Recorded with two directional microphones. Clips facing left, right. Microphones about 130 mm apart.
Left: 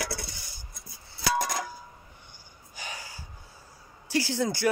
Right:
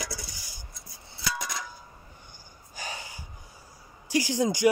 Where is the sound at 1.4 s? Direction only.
50° left (ahead or behind).